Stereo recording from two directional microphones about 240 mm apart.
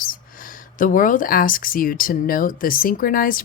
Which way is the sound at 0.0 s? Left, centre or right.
Left.